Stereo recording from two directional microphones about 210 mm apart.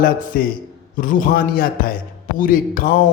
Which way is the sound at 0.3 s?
45° left (ahead or behind).